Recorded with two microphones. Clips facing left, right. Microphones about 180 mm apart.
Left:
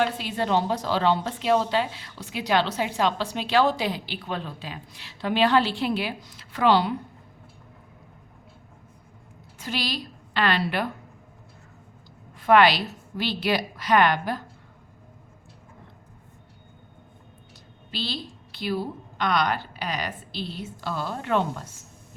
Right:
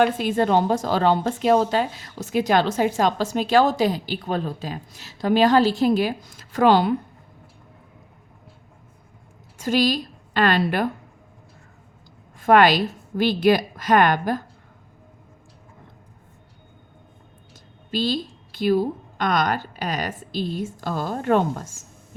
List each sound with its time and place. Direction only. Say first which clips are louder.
0.0 s a woman's voice: right 6 dB; 50° right (ahead or behind)
9.6 s a woman's voice: right 10 dB; 45° right (ahead or behind)
12.4 s a woman's voice: right 3 dB; 45° right (ahead or behind)
17.9 s a woman's voice: right 9 dB; 45° right (ahead or behind)